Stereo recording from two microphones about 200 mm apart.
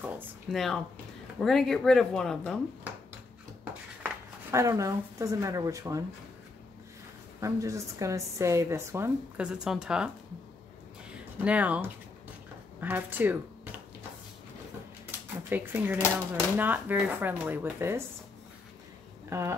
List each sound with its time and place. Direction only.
0.0 s speech: 10° right (ahead or behind)
4.0 s speech: 15° right (ahead or behind)
7.3 s a woman's voice: 15° right (ahead or behind)
11.1 s a sound: 5° right (ahead or behind)
12.8 s speech: 10° right (ahead or behind)
15.0 s a sound: 10° right (ahead or behind)
16.5 s a woman's voice: 10° right (ahead or behind)
19.2 s speech: 15° right (ahead or behind)